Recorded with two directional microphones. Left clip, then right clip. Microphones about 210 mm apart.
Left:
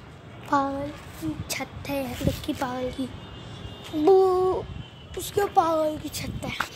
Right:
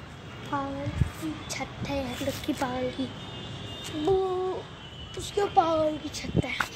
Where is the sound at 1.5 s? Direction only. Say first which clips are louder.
Left 2 dB; 25° left (ahead or behind).